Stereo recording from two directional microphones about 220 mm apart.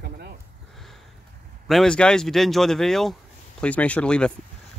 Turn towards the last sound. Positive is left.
turn(degrees=5)  # may be behind; listen again after turning